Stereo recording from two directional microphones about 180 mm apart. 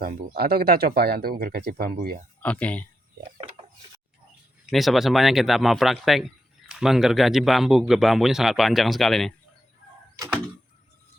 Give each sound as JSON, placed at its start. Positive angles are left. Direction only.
{"t": 0.0, "sound": "speech", "side_deg": -55}
{"t": 2.4, "sound": "speech", "side_deg": 10}
{"t": 4.6, "sound": "a man's voice", "side_deg": 0}